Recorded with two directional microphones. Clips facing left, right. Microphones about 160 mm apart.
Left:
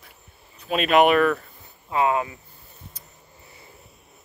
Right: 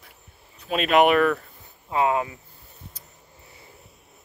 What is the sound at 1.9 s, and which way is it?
Speech, 25° right (ahead or behind).